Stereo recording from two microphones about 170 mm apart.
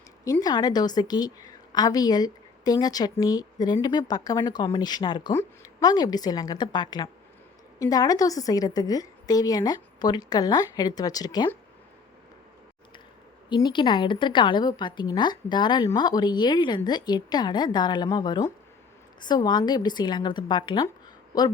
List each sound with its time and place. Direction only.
0.3 s a woman's voice: 20° left (ahead or behind)
13.5 s a woman's voice: 25° left (ahead or behind)